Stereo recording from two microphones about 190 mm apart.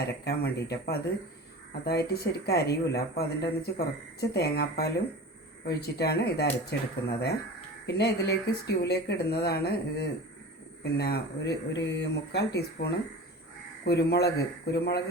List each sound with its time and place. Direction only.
0.0 s speech: 55° left (ahead or behind)